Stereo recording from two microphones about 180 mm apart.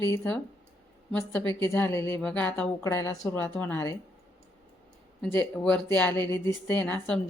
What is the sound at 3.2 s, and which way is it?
Speech, 5° left (ahead or behind).